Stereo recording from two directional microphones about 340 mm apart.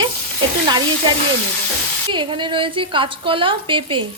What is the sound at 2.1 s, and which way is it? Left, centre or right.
A woman's voice, centre.